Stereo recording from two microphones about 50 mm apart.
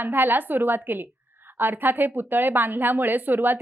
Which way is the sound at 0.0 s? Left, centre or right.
Right.